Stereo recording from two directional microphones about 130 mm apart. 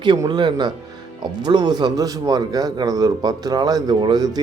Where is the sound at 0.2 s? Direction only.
35° right (ahead or behind).